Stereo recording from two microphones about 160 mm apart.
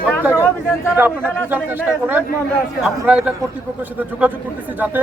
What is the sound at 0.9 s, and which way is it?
A man's voice, 10° right (ahead or behind).